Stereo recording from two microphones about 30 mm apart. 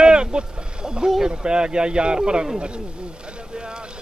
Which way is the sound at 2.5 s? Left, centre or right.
Right.